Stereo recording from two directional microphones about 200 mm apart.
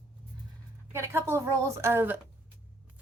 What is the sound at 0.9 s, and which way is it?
A woman's voice, 10° right (ahead or behind).